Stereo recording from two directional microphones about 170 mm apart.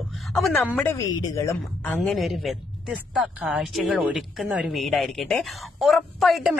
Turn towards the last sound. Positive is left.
turn(degrees=0)  # may be behind; listen again after turning